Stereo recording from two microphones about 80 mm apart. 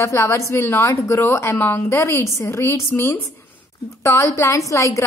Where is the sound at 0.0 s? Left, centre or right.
Left.